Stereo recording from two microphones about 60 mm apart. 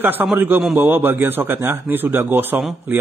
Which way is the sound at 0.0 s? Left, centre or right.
Right.